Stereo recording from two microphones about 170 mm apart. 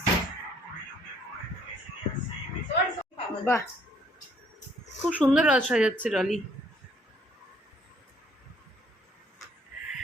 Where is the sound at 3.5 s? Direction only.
15° left (ahead or behind).